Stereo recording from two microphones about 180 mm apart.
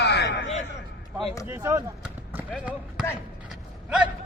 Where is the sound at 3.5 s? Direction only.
5° right (ahead or behind).